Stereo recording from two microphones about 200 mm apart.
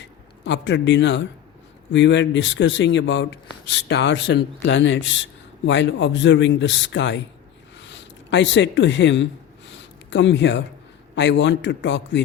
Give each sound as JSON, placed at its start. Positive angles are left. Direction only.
{"t": 0.4, "sound": "speech", "side_deg": 65}
{"t": 9.6, "sound": "a sound", "side_deg": 65}
{"t": 11.1, "sound": "speech", "side_deg": 65}